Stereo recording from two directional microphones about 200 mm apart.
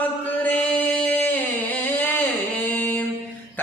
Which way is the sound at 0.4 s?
10° left (ahead or behind).